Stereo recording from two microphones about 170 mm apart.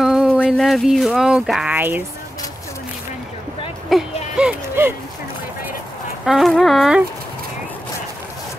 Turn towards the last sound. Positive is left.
turn(degrees=-5)  # may be behind; listen again after turning